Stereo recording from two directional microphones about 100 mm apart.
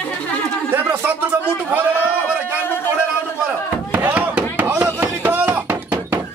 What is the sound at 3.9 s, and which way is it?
Chop, 15° right (ahead or behind).